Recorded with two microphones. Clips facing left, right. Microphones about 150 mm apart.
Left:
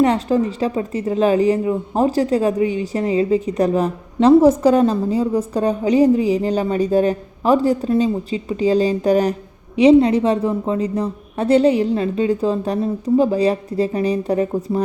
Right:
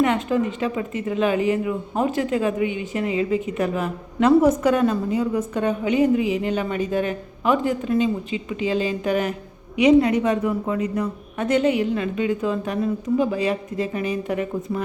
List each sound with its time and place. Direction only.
0.0 s speech: 35° left (ahead or behind)